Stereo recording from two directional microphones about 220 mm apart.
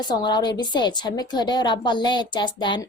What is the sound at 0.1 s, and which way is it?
A woman's voice, 20° left (ahead or behind).